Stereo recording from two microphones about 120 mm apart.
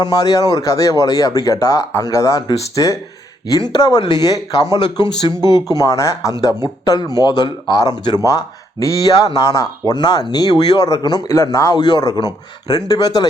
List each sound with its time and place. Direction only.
0.0 s speech: 30° left (ahead or behind)